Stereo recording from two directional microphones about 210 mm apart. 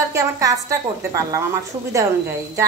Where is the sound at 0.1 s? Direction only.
15° right (ahead or behind).